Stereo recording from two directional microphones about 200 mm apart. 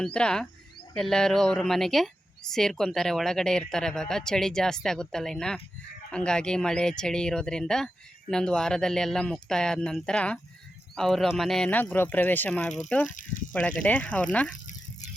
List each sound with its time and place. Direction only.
0.0 s a woman's voice: 5° left (ahead or behind)
13.1 s speech: 40° left (ahead or behind)
13.5 s speech: 5° left (ahead or behind)